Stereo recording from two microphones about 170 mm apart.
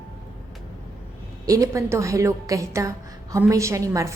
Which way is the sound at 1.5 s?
20° right (ahead or behind).